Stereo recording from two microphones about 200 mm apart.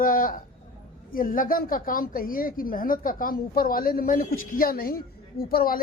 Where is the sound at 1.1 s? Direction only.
45° left (ahead or behind).